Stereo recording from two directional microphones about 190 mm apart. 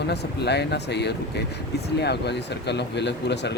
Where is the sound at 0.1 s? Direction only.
60° left (ahead or behind).